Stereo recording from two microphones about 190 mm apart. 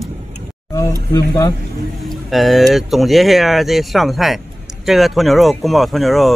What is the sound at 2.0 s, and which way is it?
Speech, centre (ahead or behind).